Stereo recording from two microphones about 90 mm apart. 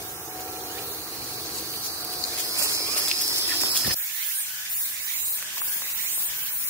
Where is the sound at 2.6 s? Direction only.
35° right (ahead or behind).